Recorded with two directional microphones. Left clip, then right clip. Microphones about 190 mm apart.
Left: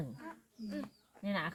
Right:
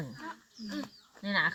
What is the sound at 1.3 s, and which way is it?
Speech, 15° right (ahead or behind).